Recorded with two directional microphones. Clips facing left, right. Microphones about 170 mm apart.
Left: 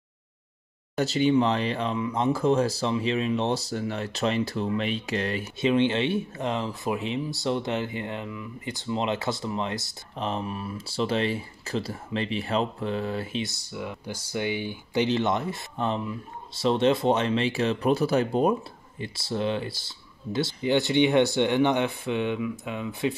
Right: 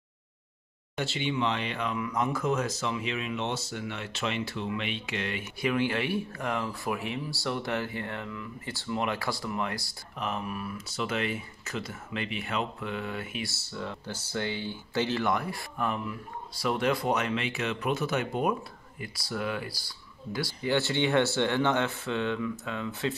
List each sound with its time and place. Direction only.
0.9 s speech: 40° left (ahead or behind)
5.6 s speech: 25° left (ahead or behind)
13.4 s speech: 15° left (ahead or behind)